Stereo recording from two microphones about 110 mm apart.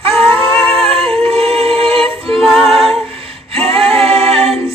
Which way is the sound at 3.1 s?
60° right (ahead or behind).